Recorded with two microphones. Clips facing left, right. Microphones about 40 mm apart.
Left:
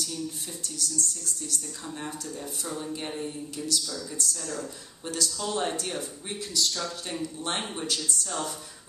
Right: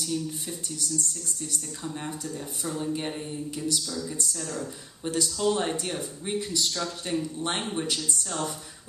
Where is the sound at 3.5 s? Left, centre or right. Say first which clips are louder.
Right 2 dB; centre.